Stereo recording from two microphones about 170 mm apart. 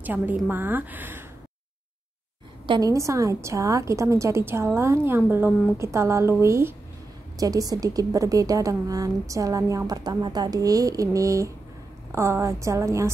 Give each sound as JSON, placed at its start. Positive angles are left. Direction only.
{"t": 0.0, "sound": "a woman's voice", "side_deg": -10}
{"t": 2.6, "sound": "a woman's voice", "side_deg": -25}